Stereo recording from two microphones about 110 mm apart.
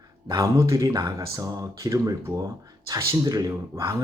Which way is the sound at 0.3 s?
25° right (ahead or behind).